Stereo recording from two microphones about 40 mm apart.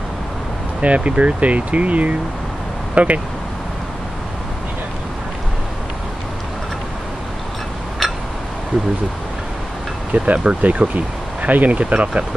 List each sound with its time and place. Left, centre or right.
0.7 s speech: right
2.9 s vehicle: right
8.0 s a sound: centre
10.1 s speech: right
11.8 s speech: right